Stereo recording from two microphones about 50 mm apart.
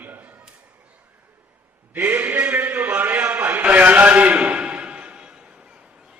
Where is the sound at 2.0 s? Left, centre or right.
Right.